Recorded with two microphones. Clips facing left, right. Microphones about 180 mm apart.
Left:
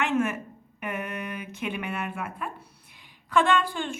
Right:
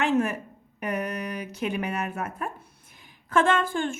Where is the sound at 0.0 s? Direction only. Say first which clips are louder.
Right 2 dB; 35° right (ahead or behind).